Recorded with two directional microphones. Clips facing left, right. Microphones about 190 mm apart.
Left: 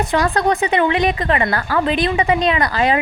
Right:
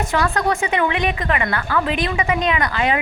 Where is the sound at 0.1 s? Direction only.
35° left (ahead or behind).